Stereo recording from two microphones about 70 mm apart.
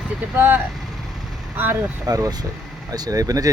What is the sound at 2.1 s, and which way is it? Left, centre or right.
Speech, right.